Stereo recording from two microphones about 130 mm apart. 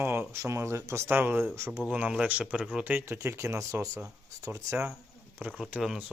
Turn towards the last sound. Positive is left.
turn(degrees=-5)  # may be behind; listen again after turning